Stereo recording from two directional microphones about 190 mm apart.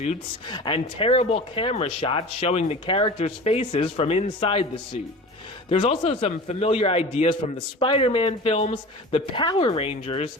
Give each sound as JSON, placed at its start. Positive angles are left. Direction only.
{"t": 0.5, "sound": "speech", "side_deg": 25}
{"t": 5.6, "sound": "speech", "side_deg": 30}